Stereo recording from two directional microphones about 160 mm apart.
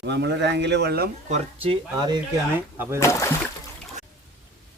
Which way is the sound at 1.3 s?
35° right (ahead or behind).